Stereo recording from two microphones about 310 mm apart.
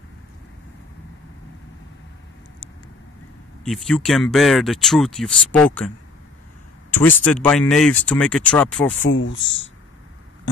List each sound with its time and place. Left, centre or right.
3.6 s speech: centre
7.0 s speech: centre
9.0 s speech: left